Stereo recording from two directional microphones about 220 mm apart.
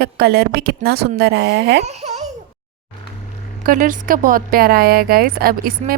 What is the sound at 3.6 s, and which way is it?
Speech, 35° right (ahead or behind).